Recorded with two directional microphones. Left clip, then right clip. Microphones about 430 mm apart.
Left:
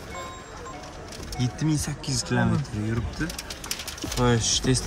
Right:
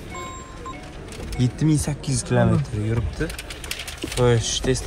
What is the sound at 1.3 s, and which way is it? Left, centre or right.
Speech, centre.